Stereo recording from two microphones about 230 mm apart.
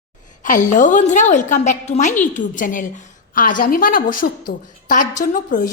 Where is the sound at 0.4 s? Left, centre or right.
Left.